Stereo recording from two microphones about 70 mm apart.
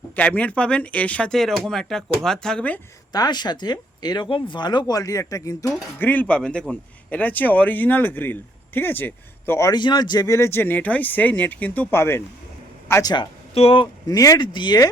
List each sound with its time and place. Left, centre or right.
0.2 s a man's voice: left
1.3 s speech: centre
3.1 s speech: left
6.0 s a man's voice: left
9.7 s a man's voice: left
10.2 s a man's voice: left
11.9 s speech: left
14.1 s speech: left